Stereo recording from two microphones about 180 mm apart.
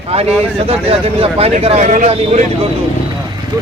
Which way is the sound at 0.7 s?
35° right (ahead or behind).